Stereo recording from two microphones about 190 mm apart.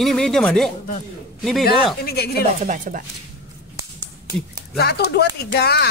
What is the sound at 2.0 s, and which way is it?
Speech, 55° left (ahead or behind).